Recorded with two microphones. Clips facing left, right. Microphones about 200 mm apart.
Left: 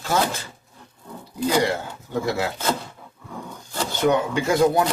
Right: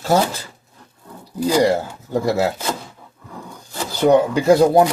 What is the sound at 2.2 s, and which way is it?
Speech, 35° right (ahead or behind).